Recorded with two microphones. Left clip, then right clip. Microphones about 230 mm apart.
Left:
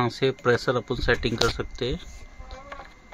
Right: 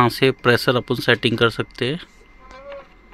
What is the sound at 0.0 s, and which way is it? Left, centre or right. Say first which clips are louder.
Speech: right 7 dB; right.